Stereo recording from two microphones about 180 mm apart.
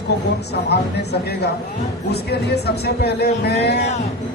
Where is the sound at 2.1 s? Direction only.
65° left (ahead or behind).